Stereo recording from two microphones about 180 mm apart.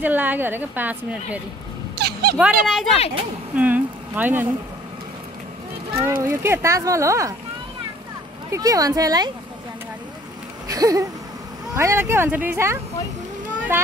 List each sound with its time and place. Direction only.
0.0 s a woman's voice: 10° right (ahead or behind)
2.0 s a sound: 60° right (ahead or behind)
2.3 s speech: centre (ahead or behind)
6.0 s a woman's voice: 15° right (ahead or behind)
8.5 s speech: 20° right (ahead or behind)
10.7 s a woman's voice: 20° right (ahead or behind)